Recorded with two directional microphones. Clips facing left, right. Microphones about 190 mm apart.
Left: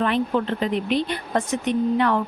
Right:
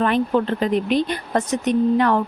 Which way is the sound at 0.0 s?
45° right (ahead or behind).